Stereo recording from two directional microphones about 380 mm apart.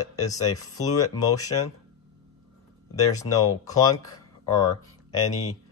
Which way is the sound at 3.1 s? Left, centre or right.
Centre.